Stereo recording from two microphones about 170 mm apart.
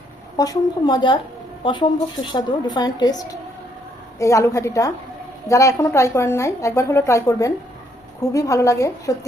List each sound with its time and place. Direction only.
0.3 s a woman's voice: 20° left (ahead or behind)